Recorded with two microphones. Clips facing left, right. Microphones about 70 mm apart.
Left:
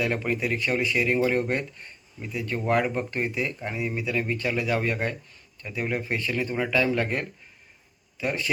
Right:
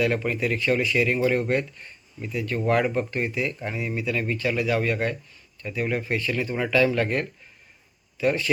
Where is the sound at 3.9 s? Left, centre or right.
Centre.